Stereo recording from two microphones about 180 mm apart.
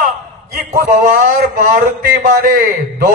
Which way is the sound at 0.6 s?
55° right (ahead or behind).